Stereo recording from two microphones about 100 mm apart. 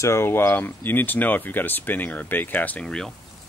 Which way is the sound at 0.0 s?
25° left (ahead or behind).